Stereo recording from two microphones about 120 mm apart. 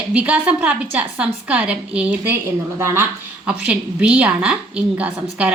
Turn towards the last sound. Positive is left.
turn(degrees=-10)  # may be behind; listen again after turning